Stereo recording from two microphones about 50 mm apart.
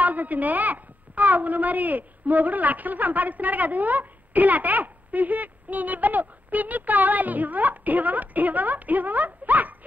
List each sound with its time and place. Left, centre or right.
0.0 s a woman's voice: right